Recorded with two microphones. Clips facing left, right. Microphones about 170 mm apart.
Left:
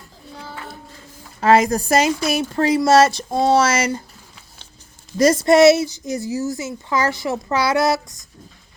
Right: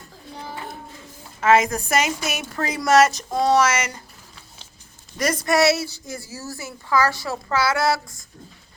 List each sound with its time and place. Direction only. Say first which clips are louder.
1.4 s a woman's voice: left 3 dB; 35° left (ahead or behind)
5.1 s speech: left 8 dB; 25° left (ahead or behind)